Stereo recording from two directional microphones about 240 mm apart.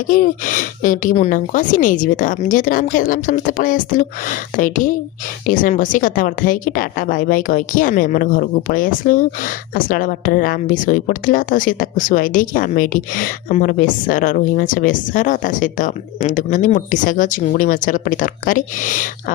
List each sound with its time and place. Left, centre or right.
0.1 s a woman's voice: left